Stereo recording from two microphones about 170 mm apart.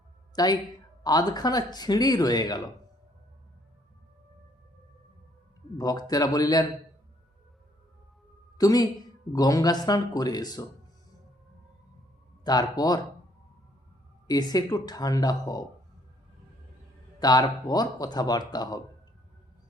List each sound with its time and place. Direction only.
0.3 s speech: 25° left (ahead or behind)
5.7 s speech: 25° left (ahead or behind)
8.5 s speech: 20° left (ahead or behind)
12.5 s speech: 25° left (ahead or behind)
14.3 s speech: 25° left (ahead or behind)
17.2 s speech: 25° left (ahead or behind)